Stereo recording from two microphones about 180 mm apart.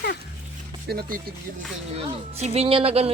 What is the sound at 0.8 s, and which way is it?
Speech, 60° right (ahead or behind).